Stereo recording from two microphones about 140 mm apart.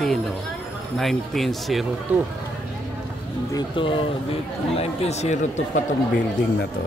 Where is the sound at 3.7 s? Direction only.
40° left (ahead or behind); by 5.8 s 60° left (ahead or behind).